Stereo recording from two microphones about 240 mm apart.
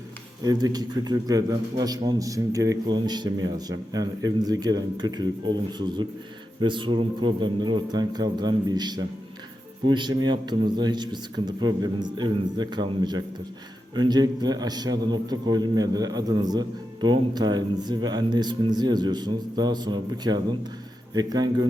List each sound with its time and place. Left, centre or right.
0.4 s a man's voice: centre